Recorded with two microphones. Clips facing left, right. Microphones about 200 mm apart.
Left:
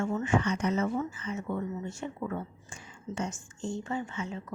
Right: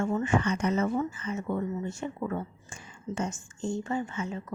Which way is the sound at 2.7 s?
50° right (ahead or behind).